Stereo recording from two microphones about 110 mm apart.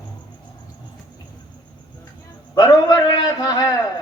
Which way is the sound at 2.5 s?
35° left (ahead or behind).